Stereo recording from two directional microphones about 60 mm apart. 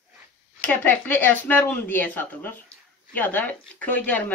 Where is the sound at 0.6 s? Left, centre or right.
Left.